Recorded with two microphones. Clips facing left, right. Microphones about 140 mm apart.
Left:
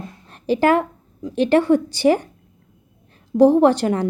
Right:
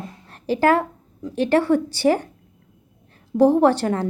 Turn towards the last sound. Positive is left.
turn(degrees=15)  # may be behind; listen again after turning